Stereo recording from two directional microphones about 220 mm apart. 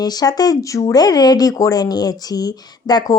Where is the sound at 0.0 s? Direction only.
15° left (ahead or behind).